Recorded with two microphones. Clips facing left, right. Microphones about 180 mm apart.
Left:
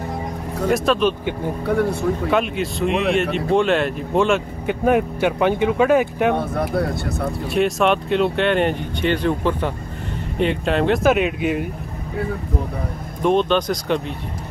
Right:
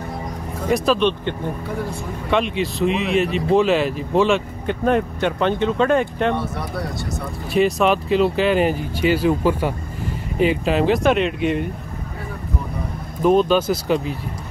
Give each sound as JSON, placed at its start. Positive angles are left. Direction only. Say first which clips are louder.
{"t": 0.7, "sound": "speech", "louder": "even", "side_deg": 0}
{"t": 2.3, "sound": "speech", "louder": "even", "side_deg": 0}
{"t": 6.3, "sound": "speech", "louder": "left 4 dB", "side_deg": 55}
{"t": 7.4, "sound": "speech", "louder": "right 1 dB", "side_deg": 0}
{"t": 13.2, "sound": "speech", "louder": "right 2 dB", "side_deg": -5}